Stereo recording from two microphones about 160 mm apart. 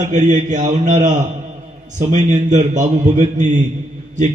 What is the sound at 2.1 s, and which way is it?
A man's voice, 45° right (ahead or behind).